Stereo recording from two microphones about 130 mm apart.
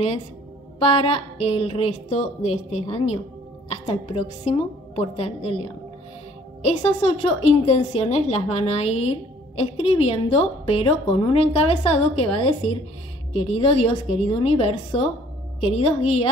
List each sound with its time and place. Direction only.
0.7 s a woman's voice: 45° left (ahead or behind)
6.6 s a woman's voice: 50° left (ahead or behind)